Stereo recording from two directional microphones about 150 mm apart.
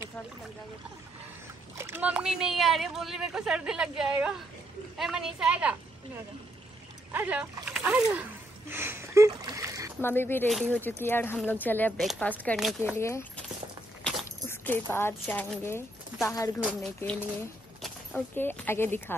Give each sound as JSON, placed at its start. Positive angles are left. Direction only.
{"t": 1.8, "sound": "speech", "side_deg": -15}
{"t": 7.1, "sound": "speech", "side_deg": -10}
{"t": 10.0, "sound": "speech", "side_deg": 15}
{"t": 12.0, "sound": "speech", "side_deg": 0}
{"t": 12.8, "sound": "speech", "side_deg": 15}
{"t": 14.5, "sound": "speech", "side_deg": 15}
{"t": 16.6, "sound": "speech", "side_deg": 5}